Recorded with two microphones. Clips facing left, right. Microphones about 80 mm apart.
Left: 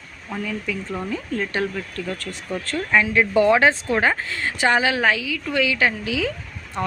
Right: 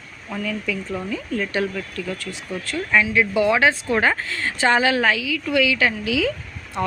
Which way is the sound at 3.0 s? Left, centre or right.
Left.